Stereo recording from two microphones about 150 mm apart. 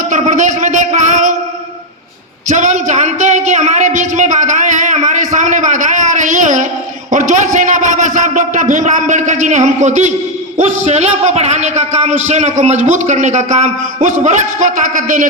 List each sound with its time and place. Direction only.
0.1 s speech: 55° right (ahead or behind)
2.5 s a sound: 55° right (ahead or behind)
7.1 s a man's voice: 55° right (ahead or behind)